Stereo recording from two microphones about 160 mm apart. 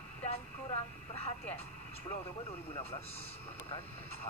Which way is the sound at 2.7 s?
40° left (ahead or behind).